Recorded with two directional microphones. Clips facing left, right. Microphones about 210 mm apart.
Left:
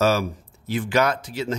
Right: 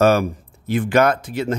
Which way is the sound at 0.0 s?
55° right (ahead or behind).